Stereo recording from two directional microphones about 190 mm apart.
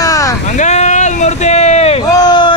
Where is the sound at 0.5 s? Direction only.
40° left (ahead or behind).